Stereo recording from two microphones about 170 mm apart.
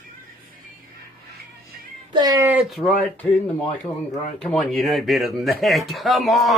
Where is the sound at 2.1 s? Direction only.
25° right (ahead or behind).